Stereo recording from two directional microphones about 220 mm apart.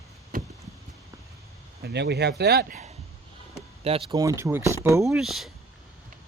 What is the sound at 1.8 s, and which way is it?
Speech, 50° right (ahead or behind).